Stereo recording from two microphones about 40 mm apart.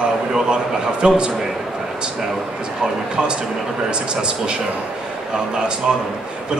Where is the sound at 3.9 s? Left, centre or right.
Right.